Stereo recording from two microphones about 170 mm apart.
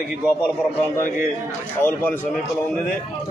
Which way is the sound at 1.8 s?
10° left (ahead or behind).